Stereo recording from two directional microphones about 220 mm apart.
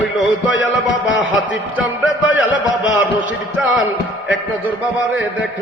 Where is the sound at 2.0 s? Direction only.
5° right (ahead or behind).